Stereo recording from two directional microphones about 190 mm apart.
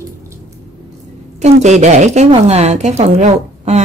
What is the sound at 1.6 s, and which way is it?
A woman's voice, 35° right (ahead or behind).